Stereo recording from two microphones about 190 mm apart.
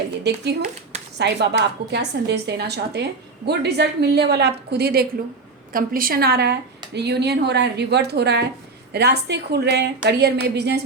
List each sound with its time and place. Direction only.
0.3 s a woman's voice: 60° right (ahead or behind)